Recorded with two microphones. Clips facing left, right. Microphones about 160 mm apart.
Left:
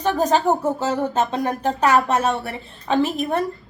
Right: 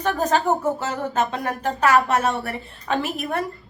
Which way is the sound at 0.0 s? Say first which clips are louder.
Left 2 dB; 20° left (ahead or behind).